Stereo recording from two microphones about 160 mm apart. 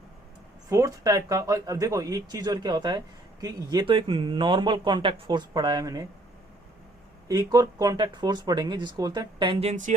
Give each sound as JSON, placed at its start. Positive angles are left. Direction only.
{"t": 0.7, "sound": "speech", "side_deg": -20}
{"t": 7.3, "sound": "speech", "side_deg": -20}